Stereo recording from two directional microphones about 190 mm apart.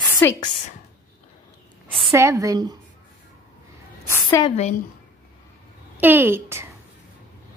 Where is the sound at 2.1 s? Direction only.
15° right (ahead or behind).